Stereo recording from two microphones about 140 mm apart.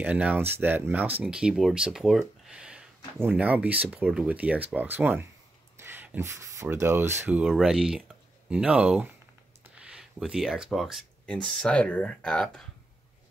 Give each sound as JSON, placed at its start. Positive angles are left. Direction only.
{"t": 0.0, "sound": "speech", "side_deg": -10}